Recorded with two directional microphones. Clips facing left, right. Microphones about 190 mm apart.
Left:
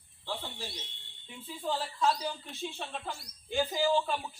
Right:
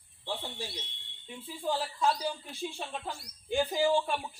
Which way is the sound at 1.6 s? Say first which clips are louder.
Right 1 dB; 10° right (ahead or behind).